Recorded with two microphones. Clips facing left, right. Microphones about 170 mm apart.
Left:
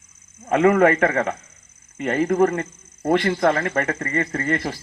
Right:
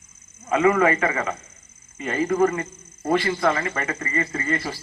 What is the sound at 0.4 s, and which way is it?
Speech, 55° left (ahead or behind).